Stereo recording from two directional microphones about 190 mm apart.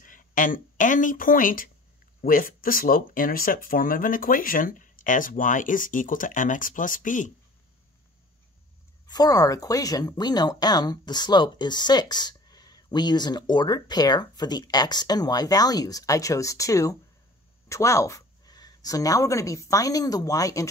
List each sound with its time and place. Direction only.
0.0 s speech: 45° left (ahead or behind)
9.0 s speech: 20° left (ahead or behind)